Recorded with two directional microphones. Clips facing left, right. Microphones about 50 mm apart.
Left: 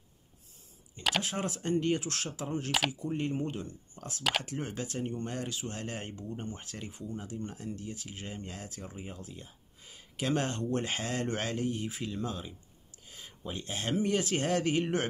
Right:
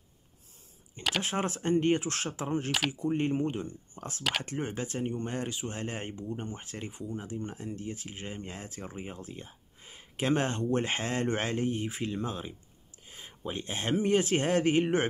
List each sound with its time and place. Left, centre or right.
1.2 s speech: right